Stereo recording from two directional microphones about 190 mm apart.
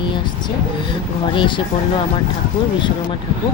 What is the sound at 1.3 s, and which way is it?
Speech, 25° left (ahead or behind).